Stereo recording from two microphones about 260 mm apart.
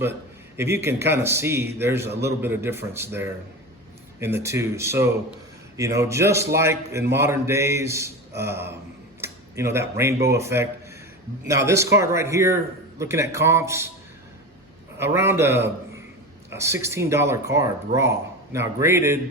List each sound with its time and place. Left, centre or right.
0.5 s speech: centre
14.9 s speech: centre